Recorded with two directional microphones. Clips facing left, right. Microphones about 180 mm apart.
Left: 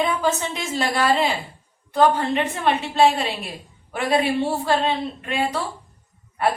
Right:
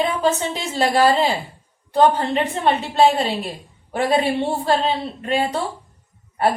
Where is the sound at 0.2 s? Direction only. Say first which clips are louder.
Right 3 dB; 30° right (ahead or behind).